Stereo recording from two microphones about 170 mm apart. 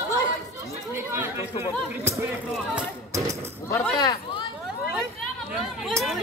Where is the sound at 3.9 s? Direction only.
25° left (ahead or behind).